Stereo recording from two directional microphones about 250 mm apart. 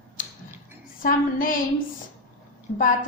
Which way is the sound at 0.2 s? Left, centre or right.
Left.